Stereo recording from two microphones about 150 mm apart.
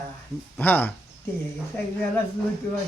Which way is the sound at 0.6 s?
10° left (ahead or behind).